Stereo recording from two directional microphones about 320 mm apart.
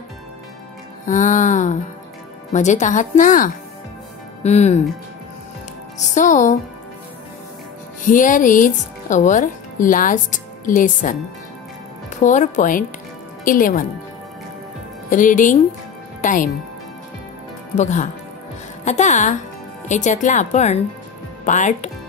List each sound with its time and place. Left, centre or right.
1.0 s speech: left
5.9 s speech: left
8.0 s speech: left
12.2 s a woman's voice: left
15.0 s speech: left
17.7 s speech: left